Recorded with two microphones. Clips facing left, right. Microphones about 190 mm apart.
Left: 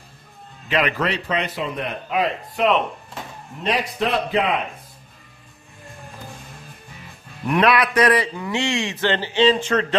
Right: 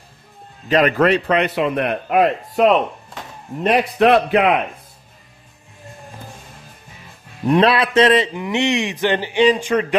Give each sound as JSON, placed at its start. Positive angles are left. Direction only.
{"t": 0.7, "sound": "a man's voice", "side_deg": -45}
{"t": 3.6, "sound": "a man's voice", "side_deg": -60}
{"t": 7.4, "sound": "speech", "side_deg": -30}